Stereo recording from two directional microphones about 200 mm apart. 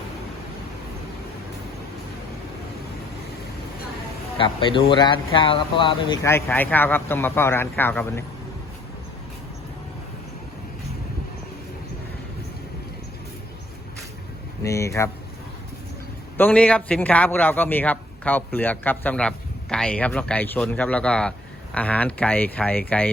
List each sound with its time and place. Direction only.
4.4 s speech: 25° left (ahead or behind)
6.2 s a man's voice: 10° left (ahead or behind)
14.6 s a man's voice: 15° left (ahead or behind)
16.4 s a man's voice: 5° left (ahead or behind)